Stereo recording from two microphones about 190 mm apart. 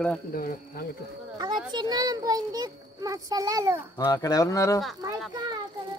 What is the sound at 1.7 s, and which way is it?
A child's voice, 20° right (ahead or behind).